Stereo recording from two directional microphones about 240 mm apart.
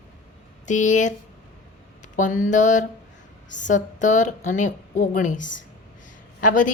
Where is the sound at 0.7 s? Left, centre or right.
Left.